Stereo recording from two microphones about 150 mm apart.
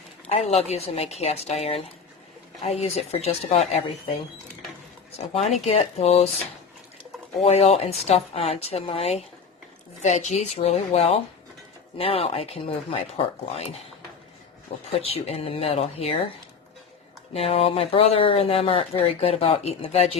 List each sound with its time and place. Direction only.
0.3 s a woman's voice: 45° left (ahead or behind)
5.1 s a woman's voice: 45° left (ahead or behind)
7.4 s a woman's voice: 45° left (ahead or behind)
14.9 s speech: 40° left (ahead or behind)
17.3 s speech: 40° left (ahead or behind)